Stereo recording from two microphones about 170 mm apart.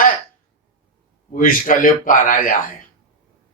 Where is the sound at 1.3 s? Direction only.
50° left (ahead or behind).